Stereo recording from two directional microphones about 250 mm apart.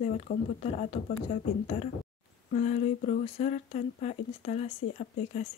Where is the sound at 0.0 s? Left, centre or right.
Left.